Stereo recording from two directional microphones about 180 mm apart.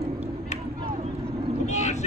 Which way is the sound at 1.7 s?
40° left (ahead or behind).